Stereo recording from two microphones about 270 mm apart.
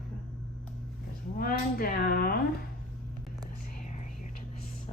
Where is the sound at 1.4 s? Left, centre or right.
Left.